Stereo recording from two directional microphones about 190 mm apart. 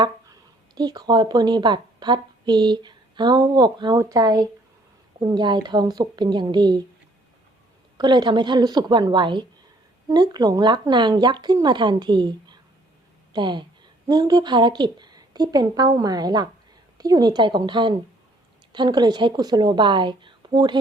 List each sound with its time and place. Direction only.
0.8 s a woman's voice: 20° right (ahead or behind)
7.9 s a woman's voice: 25° right (ahead or behind)